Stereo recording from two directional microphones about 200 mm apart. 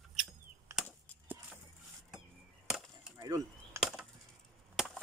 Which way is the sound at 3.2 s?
15° right (ahead or behind).